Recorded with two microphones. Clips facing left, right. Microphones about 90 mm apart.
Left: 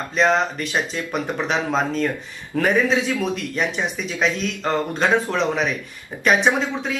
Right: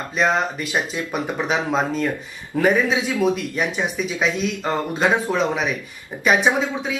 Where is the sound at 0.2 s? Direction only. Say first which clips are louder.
Left 1 dB; 5° right (ahead or behind).